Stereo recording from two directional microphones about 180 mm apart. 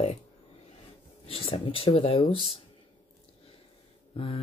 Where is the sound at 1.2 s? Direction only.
30° left (ahead or behind).